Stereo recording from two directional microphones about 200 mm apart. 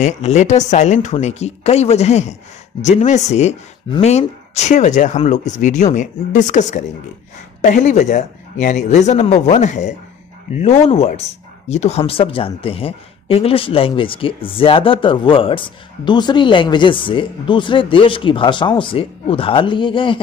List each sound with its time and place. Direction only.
0.0 s speech: 35° left (ahead or behind)